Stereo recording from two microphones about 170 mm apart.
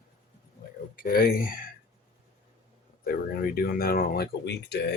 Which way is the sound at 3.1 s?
60° left (ahead or behind).